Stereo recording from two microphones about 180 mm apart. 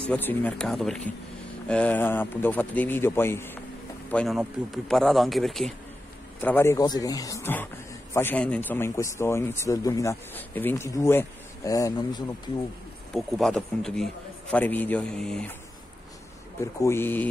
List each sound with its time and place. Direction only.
0.1 s a man's voice: 10° left (ahead or behind)
6.4 s a man's voice: 10° left (ahead or behind)
13.1 s a man's voice: 5° left (ahead or behind)
16.8 s a man's voice: 10° left (ahead or behind)